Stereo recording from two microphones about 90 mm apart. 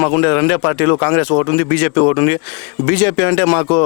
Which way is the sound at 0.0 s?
25° left (ahead or behind).